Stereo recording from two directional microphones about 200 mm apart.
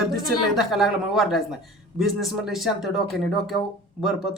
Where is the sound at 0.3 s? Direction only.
Centre (ahead or behind).